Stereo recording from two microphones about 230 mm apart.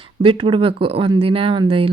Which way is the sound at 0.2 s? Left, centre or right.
Right.